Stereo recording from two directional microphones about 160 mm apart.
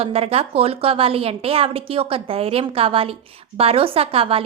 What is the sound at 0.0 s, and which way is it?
A woman's voice, 35° right (ahead or behind).